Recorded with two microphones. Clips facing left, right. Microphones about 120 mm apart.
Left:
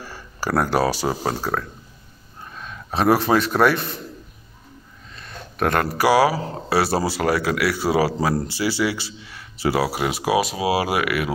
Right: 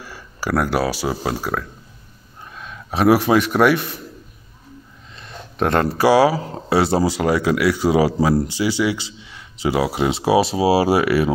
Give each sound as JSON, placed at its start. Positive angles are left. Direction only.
{"t": 0.0, "sound": "speech", "side_deg": -5}
{"t": 2.9, "sound": "a man's voice", "side_deg": -10}
{"t": 5.1, "sound": "speech", "side_deg": -20}